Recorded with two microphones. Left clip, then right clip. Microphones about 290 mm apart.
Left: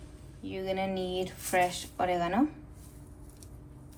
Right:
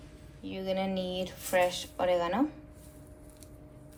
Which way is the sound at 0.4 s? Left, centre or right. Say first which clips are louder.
Even; centre.